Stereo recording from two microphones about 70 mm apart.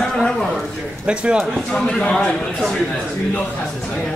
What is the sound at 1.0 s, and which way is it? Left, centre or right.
Speech, centre.